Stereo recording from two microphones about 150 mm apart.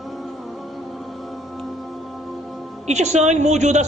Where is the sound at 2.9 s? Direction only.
50° right (ahead or behind).